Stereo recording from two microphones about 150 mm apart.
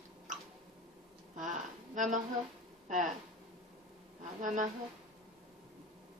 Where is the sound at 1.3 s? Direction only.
60° right (ahead or behind).